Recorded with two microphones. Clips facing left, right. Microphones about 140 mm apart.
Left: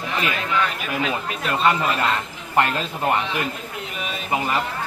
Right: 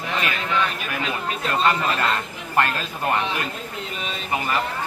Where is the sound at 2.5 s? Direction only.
20° left (ahead or behind).